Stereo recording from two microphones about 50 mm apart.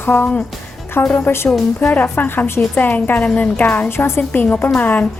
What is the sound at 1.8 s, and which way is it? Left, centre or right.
A woman's voice, left.